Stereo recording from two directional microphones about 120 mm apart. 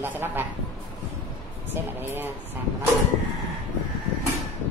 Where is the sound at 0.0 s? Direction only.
15° right (ahead or behind).